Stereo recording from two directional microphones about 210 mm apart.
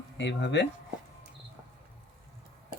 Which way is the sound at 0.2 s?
55° left (ahead or behind).